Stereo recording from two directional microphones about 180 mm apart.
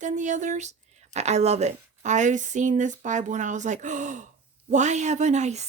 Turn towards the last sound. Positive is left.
turn(degrees=-40)  # may be behind; listen again after turning